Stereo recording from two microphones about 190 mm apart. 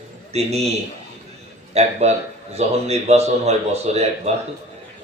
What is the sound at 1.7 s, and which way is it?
A man's voice, 35° right (ahead or behind).